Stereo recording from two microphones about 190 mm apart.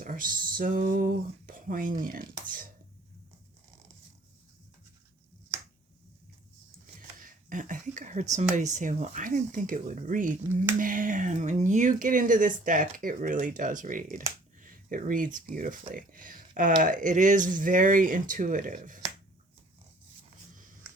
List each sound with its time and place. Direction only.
0.0 s speech: 45° right (ahead or behind)
7.2 s speech: 45° right (ahead or behind)